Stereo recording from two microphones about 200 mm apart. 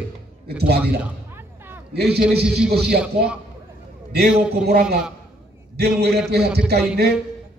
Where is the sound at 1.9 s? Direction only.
55° right (ahead or behind).